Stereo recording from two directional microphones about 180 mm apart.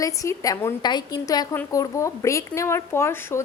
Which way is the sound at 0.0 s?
20° left (ahead or behind).